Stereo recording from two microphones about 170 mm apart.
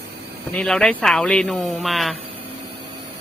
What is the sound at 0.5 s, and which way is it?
Speech, 5° left (ahead or behind).